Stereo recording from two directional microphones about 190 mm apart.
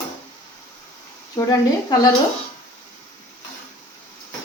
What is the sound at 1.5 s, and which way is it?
Speech, 20° left (ahead or behind).